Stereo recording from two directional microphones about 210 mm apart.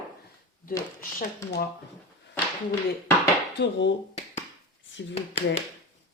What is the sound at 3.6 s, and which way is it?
Speech, 60° left (ahead or behind).